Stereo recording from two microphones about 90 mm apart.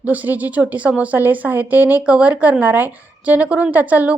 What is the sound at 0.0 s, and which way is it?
A woman's voice, 20° right (ahead or behind).